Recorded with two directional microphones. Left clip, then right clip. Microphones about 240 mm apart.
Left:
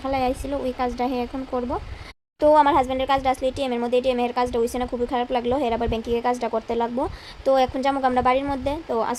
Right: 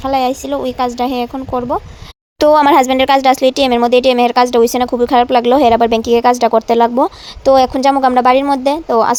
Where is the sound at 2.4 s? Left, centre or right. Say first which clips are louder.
Right 8 dB; right.